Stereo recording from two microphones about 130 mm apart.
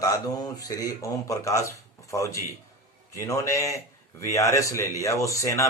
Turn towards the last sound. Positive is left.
turn(degrees=25)  # may be behind; listen again after turning